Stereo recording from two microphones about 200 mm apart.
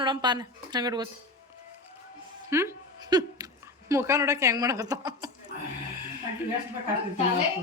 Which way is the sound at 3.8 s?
15° right (ahead or behind).